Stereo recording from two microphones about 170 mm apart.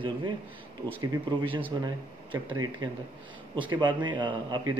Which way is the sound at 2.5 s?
25° right (ahead or behind).